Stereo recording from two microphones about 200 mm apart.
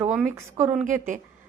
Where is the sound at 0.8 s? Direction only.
40° right (ahead or behind).